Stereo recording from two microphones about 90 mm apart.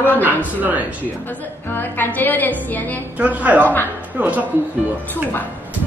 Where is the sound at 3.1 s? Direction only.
15° right (ahead or behind).